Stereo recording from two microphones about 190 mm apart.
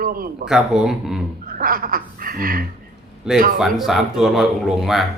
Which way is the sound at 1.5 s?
50° right (ahead or behind).